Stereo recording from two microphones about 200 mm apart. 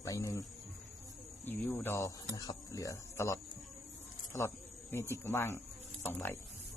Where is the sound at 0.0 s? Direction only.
15° left (ahead or behind).